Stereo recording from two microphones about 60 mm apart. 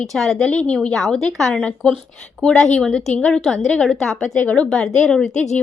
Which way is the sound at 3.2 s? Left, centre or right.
Left.